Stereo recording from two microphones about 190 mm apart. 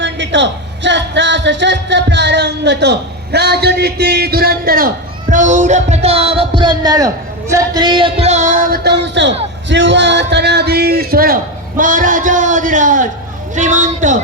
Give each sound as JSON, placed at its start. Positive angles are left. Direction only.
{"t": 0.0, "sound": "a man's voice", "side_deg": -70}